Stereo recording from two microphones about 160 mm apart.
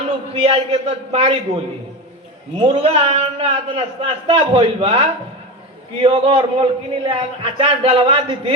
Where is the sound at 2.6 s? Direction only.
35° right (ahead or behind).